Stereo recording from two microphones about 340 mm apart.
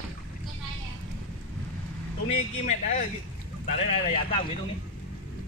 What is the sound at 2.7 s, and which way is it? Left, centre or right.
Speech, left.